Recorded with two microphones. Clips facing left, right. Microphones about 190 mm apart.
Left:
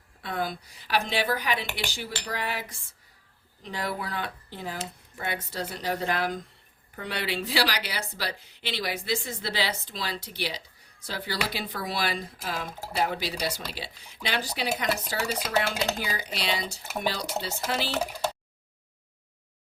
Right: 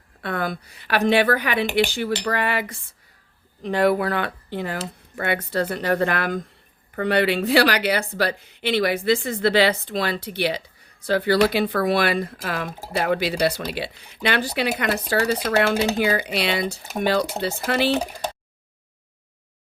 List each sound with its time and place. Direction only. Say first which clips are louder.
0.2 s speech: right 5 dB; 60° right (ahead or behind)
17.9 s speech: right 4 dB; 15° right (ahead or behind)